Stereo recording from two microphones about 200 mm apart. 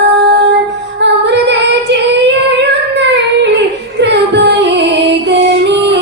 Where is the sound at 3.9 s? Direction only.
60° right (ahead or behind).